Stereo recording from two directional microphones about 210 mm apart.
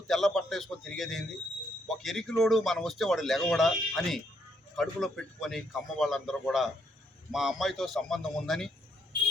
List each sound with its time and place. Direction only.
0.1 s speech: centre (ahead or behind)